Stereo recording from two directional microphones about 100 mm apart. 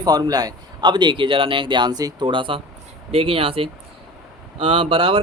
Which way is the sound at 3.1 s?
70° right (ahead or behind).